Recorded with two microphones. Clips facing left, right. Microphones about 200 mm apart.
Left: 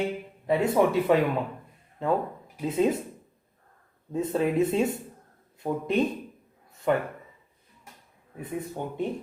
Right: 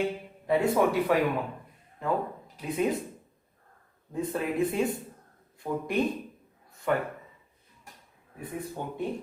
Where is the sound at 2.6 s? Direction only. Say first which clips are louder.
Left 4 dB; 25° left (ahead or behind).